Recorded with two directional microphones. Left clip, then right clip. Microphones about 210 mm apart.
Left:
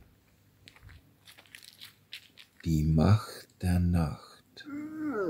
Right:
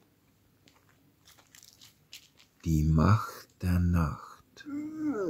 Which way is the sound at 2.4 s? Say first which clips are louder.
Right 1 dB; centre (ahead or behind).